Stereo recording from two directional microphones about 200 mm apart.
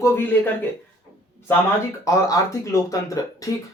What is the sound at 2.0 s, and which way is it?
Speech, 15° left (ahead or behind).